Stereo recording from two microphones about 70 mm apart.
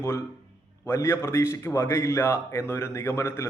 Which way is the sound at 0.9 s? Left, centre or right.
Left.